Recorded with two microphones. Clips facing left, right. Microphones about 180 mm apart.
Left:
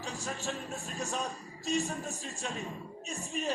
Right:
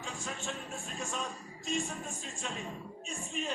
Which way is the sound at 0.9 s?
40° left (ahead or behind).